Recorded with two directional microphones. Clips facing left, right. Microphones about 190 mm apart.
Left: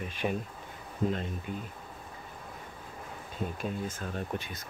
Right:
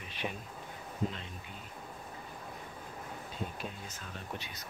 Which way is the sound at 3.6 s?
50° left (ahead or behind).